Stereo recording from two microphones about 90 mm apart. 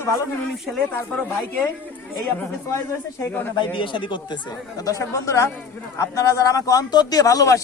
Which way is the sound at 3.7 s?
65° left (ahead or behind).